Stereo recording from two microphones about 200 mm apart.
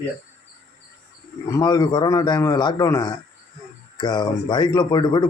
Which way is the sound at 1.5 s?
20° left (ahead or behind).